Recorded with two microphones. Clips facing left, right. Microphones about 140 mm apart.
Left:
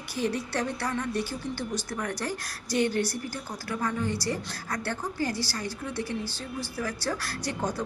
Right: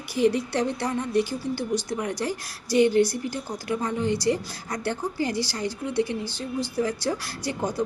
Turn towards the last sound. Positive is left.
turn(degrees=-10)  # may be behind; listen again after turning